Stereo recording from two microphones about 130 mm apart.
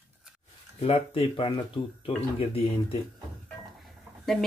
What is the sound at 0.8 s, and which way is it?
Speech, 50° left (ahead or behind).